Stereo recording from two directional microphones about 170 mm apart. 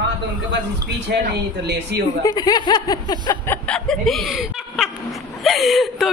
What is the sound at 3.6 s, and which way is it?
A woman's voice, 5° left (ahead or behind).